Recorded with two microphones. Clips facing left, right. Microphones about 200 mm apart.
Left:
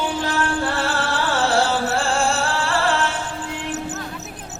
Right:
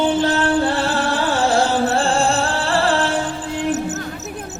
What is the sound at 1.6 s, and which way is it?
Music, 15° right (ahead or behind).